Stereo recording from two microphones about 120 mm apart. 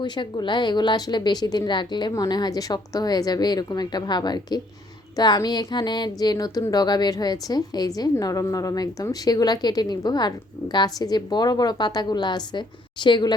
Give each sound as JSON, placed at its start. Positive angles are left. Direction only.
{"t": 0.0, "sound": "a woman's voice", "side_deg": 40}